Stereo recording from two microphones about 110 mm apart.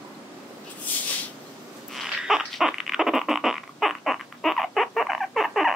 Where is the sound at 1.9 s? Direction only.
Centre (ahead or behind).